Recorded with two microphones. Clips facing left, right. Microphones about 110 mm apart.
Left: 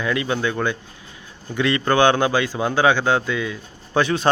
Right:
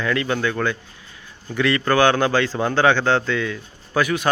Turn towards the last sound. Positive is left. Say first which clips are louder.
# left 1 dB
turn(degrees=30)  # may be behind; listen again after turning